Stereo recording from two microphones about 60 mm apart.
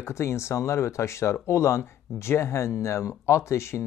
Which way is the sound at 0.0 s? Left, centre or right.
Left.